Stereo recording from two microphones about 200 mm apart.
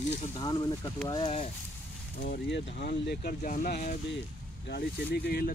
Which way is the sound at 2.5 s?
65° left (ahead or behind).